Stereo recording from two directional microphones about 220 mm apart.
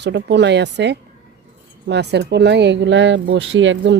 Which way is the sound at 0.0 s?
55° right (ahead or behind).